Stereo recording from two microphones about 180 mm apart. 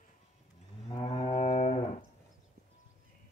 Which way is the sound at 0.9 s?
30° left (ahead or behind).